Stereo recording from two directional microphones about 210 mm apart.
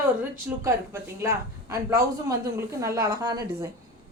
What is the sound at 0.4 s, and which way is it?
A woman's voice, 10° right (ahead or behind).